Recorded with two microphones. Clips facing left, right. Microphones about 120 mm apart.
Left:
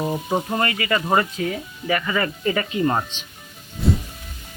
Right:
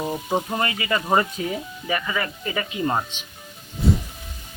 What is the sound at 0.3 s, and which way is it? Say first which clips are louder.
Speech: left 1 dB; 15° right (ahead or behind).